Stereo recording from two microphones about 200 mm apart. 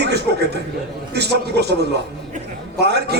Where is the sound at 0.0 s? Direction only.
55° right (ahead or behind).